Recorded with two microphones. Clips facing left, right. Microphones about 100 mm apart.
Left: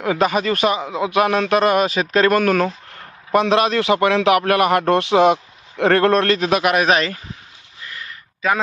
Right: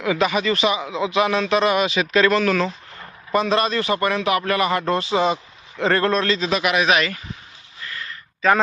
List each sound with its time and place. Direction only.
0.0 s speech: 45° left (ahead or behind)
3.3 s a man's voice: 70° left (ahead or behind); by 7.2 s 35° left (ahead or behind)
7.9 s a sound: 15° left (ahead or behind)